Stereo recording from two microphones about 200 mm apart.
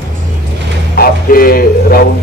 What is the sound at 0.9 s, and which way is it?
Speech, 45° left (ahead or behind).